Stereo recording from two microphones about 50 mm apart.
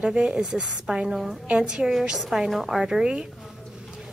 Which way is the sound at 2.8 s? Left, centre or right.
Centre.